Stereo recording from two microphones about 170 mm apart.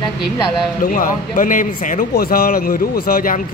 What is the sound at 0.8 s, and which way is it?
Speech, 55° left (ahead or behind).